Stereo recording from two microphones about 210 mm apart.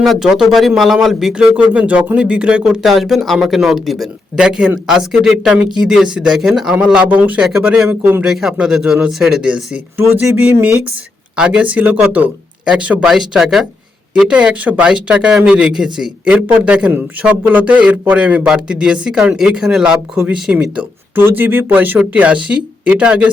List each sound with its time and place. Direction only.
0.0 s speech: centre (ahead or behind)